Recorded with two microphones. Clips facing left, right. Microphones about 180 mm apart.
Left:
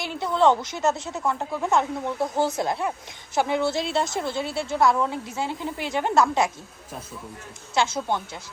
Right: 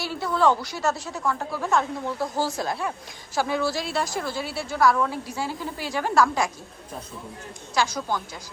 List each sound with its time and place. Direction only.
0.0 s a woman's voice: 20° left (ahead or behind)
7.8 s a woman's voice: 25° left (ahead or behind)